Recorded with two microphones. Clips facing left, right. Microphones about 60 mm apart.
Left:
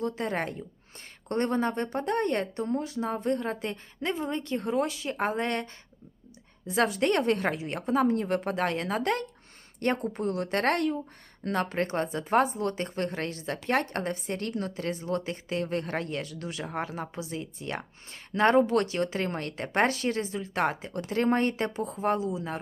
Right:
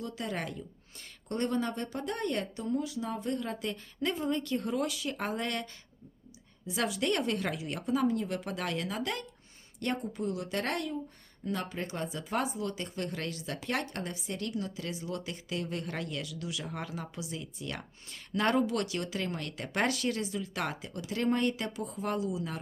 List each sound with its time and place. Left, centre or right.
0.0 s a woman's voice: left
6.7 s a woman's voice: left